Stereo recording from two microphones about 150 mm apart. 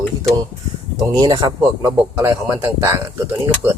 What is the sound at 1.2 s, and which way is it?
A man's voice, 25° right (ahead or behind).